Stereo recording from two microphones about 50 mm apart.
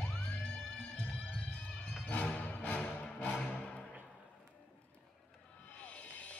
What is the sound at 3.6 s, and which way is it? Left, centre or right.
Music, centre.